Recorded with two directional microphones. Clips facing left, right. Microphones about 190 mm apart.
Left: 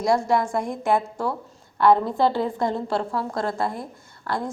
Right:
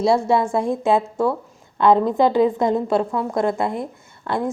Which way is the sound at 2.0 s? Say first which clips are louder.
Right 6 dB; 15° right (ahead or behind).